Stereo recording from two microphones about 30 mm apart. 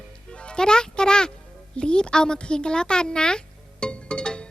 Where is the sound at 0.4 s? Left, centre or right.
Left.